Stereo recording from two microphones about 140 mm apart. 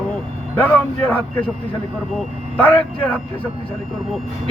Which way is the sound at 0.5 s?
10° left (ahead or behind).